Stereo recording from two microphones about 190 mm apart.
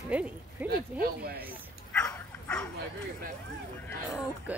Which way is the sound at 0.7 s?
55° right (ahead or behind).